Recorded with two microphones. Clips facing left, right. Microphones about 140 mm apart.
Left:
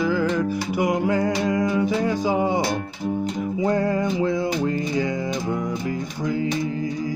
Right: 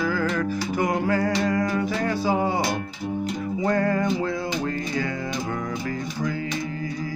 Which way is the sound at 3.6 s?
15° left (ahead or behind).